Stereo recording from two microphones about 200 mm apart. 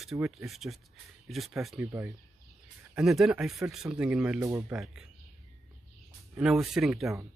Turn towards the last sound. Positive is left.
turn(degrees=0)  # may be behind; listen again after turning